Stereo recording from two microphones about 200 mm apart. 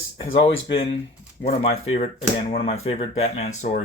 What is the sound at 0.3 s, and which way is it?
Speech, 25° left (ahead or behind).